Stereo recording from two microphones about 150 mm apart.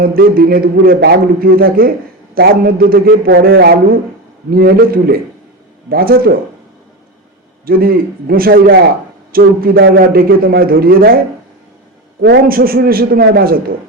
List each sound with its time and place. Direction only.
0.0 s a man's voice: 75° right (ahead or behind)
7.6 s a man's voice: 80° right
12.2 s a man's voice: 85° right